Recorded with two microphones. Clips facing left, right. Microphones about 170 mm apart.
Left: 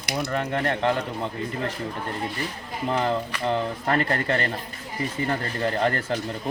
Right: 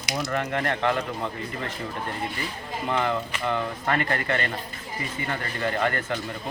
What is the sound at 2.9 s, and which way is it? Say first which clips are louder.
Speech: left 1 dB; 35° left (ahead or behind).